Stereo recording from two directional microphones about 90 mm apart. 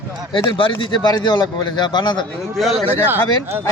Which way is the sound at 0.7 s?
55° left (ahead or behind).